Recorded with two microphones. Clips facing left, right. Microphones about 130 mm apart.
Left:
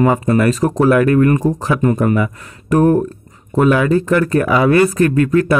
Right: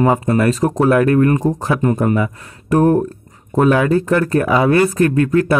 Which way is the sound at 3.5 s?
45° right (ahead or behind).